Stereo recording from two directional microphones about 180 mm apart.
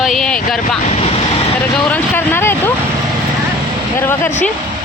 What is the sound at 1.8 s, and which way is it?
Speech, 10° left (ahead or behind).